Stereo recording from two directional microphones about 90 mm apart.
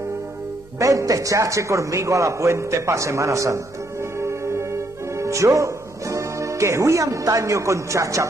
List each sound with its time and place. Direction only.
0.7 s a man's voice: 40° right (ahead or behind)
4.2 s music: 30° right (ahead or behind)
5.1 s speech: 35° right (ahead or behind)